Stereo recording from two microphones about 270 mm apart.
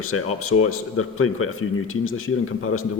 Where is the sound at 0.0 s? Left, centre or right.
Left.